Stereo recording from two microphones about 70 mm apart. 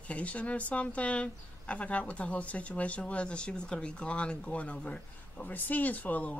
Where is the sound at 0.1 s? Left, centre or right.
Centre.